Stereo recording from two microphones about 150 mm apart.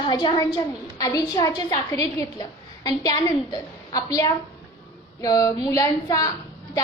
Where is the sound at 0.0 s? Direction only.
30° left (ahead or behind).